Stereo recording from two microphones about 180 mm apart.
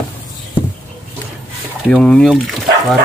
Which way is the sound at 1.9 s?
5° left (ahead or behind).